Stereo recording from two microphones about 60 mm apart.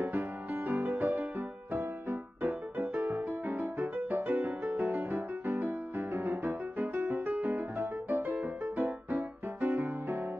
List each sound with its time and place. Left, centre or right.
0.0 s music: right